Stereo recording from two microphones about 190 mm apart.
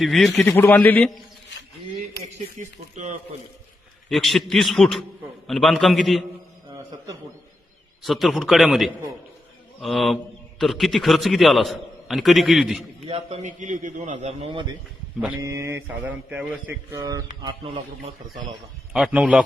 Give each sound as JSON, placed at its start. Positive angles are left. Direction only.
{"t": 0.0, "sound": "a man's voice", "side_deg": 0}
{"t": 2.6, "sound": "a man's voice", "side_deg": -40}
{"t": 4.1, "sound": "a man's voice", "side_deg": 0}
{"t": 8.0, "sound": "a man's voice", "side_deg": 0}
{"t": 13.1, "sound": "a man's voice", "side_deg": -35}
{"t": 15.4, "sound": "speech", "side_deg": -15}
{"t": 16.9, "sound": "speech", "side_deg": -20}
{"t": 18.9, "sound": "a man's voice", "side_deg": -5}